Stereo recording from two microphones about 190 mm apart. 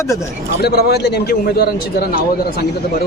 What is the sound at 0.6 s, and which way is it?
A man's voice, 55° left (ahead or behind).